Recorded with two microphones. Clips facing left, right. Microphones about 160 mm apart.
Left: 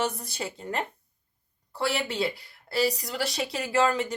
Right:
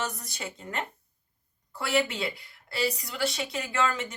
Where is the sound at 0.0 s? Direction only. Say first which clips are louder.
Left 5 dB; 30° left (ahead or behind).